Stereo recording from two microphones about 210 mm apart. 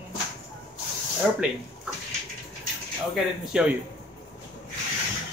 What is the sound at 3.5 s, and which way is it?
Speech, 5° right (ahead or behind).